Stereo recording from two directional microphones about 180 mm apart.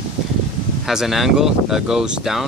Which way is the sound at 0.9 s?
Centre (ahead or behind).